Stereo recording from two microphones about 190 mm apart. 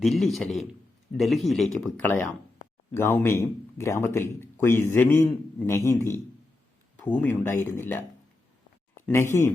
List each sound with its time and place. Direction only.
0.0 s a man's voice: centre (ahead or behind)